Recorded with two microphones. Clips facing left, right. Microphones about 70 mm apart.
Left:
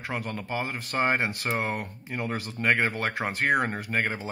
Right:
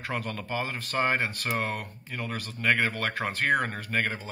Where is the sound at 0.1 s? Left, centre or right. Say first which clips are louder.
Left 1 dB; centre.